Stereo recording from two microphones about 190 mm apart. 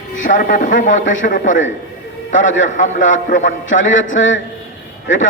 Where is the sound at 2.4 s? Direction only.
85° left.